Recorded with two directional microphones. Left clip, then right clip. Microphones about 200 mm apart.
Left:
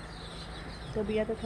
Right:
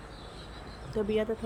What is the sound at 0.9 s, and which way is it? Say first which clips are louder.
Speech: right 2 dB; 20° right (ahead or behind).